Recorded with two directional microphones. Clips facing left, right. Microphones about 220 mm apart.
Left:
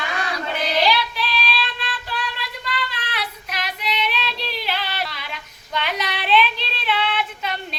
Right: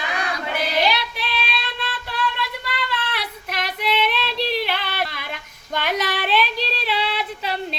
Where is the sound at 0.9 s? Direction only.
55° right (ahead or behind).